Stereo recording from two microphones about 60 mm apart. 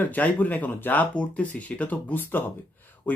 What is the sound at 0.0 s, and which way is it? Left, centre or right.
Speech, left.